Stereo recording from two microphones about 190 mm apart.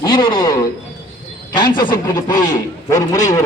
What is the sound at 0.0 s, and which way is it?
A man's voice, 20° left (ahead or behind).